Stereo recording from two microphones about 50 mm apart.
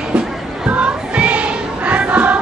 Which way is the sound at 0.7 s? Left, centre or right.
Right.